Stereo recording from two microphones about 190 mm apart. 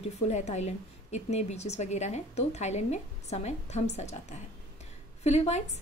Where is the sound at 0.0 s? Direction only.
35° left (ahead or behind).